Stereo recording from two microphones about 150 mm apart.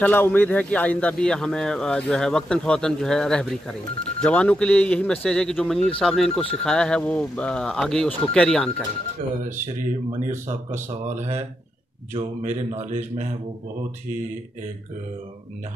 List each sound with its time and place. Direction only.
0.0 s speech: 10° left (ahead or behind)
10.7 s speech: 50° right (ahead or behind)